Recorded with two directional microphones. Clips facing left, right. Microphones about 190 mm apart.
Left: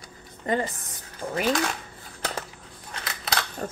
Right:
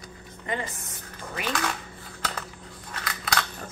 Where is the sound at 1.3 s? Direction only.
35° left (ahead or behind).